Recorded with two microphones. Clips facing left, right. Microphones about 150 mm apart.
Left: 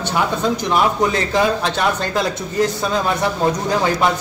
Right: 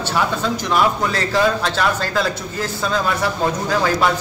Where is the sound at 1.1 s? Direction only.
20° left (ahead or behind).